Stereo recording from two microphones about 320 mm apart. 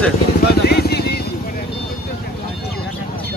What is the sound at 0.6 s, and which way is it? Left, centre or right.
Vehicle, left.